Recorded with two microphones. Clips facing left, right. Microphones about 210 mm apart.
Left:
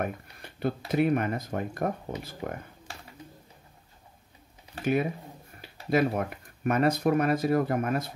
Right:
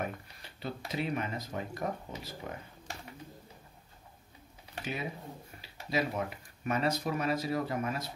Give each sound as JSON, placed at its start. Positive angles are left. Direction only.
{"t": 0.0, "sound": "speech", "side_deg": 55}
{"t": 5.6, "sound": "speech", "side_deg": 55}